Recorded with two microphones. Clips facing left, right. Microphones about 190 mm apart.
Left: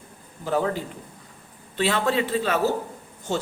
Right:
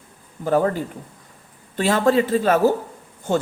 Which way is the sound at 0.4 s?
50° right (ahead or behind).